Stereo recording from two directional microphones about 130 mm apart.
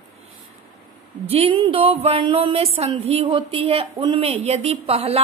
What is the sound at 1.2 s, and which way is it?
Speech, 45° right (ahead or behind).